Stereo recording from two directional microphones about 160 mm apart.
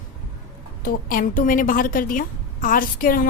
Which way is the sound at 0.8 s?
60° left (ahead or behind).